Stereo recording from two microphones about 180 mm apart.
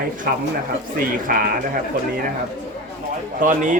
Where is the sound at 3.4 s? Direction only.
45° right (ahead or behind).